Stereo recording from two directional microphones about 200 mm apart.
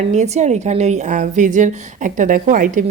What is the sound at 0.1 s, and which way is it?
A woman's voice, 35° right (ahead or behind).